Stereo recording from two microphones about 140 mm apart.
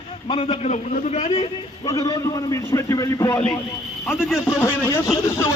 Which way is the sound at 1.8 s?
25° left (ahead or behind).